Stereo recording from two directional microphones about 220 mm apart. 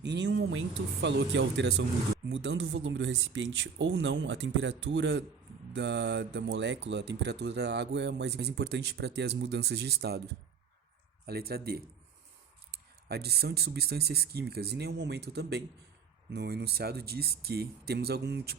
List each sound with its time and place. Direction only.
0.0 s speech: 50° right (ahead or behind)
11.3 s speech: 45° right (ahead or behind)